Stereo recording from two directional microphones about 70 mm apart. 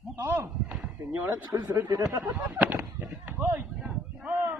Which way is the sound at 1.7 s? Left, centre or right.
Right.